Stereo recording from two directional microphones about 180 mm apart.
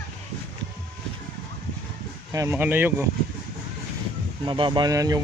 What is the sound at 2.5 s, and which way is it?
Speech, 10° right (ahead or behind).